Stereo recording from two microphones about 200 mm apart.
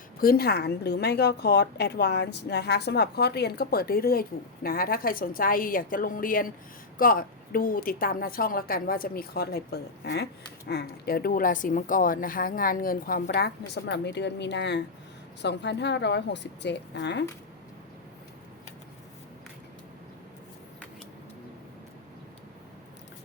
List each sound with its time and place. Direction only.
0.2 s a woman's voice: 50° left (ahead or behind)